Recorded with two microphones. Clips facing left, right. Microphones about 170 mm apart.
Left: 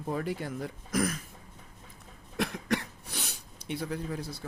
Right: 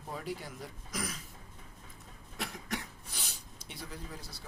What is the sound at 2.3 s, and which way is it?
Speech, 75° left (ahead or behind).